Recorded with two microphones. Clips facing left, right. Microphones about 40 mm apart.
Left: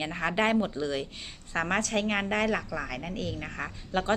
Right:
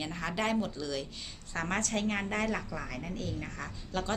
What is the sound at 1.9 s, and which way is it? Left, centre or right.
Speech, left.